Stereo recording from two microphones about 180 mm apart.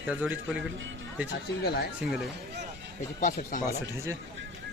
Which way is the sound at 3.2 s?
45° left (ahead or behind).